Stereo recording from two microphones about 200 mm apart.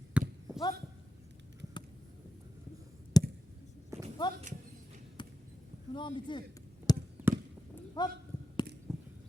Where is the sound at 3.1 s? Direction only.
20° left (ahead or behind).